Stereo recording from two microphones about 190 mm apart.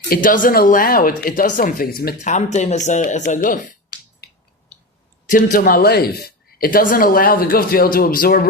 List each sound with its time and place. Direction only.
0.1 s speech: 45° left (ahead or behind)
5.3 s speech: 50° left (ahead or behind)